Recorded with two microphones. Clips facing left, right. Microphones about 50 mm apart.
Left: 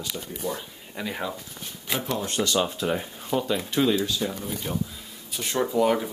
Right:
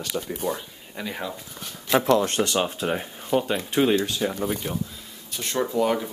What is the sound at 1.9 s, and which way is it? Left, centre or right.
Speech, right.